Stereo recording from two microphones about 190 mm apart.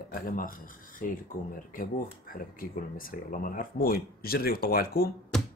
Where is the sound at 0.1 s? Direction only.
50° left (ahead or behind).